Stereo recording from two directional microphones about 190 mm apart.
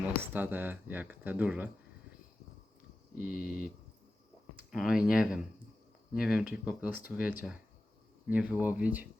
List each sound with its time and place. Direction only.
0.0 s speech: 10° right (ahead or behind)
3.2 s a sound: 50° left (ahead or behind)
4.5 s speech: 5° right (ahead or behind)